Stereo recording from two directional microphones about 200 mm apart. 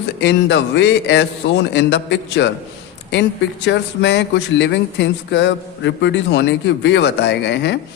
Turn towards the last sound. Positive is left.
turn(degrees=60)  # may be behind; listen again after turning